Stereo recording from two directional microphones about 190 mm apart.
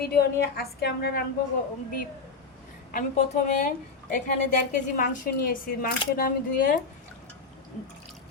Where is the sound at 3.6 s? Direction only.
40° left (ahead or behind).